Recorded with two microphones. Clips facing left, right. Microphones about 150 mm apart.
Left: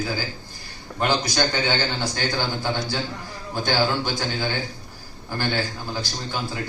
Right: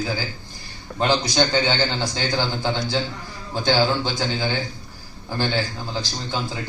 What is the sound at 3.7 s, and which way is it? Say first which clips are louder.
Speech: right 3 dB; 15° right (ahead or behind).